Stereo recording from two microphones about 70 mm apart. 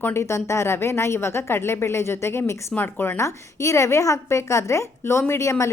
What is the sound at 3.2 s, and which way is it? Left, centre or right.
A woman's voice, left.